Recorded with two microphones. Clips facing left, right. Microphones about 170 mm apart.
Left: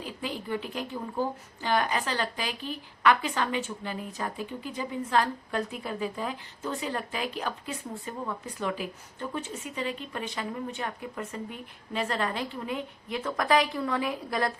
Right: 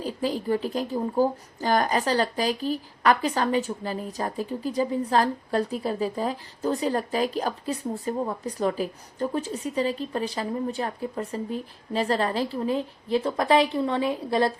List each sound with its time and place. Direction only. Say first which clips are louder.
0.0 s speech: right 8 dB; 35° right (ahead or behind)